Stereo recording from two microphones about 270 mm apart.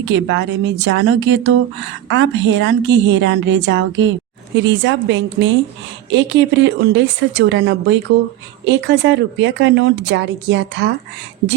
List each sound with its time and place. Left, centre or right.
0.0 s a woman's voice: right